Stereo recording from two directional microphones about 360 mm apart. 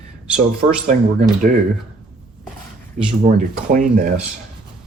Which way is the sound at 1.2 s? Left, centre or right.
Right.